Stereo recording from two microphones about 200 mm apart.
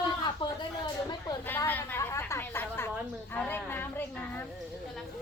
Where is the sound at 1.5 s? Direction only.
10° left (ahead or behind).